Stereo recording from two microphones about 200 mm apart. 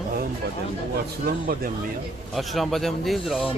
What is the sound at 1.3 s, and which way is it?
Speech, 50° right (ahead or behind).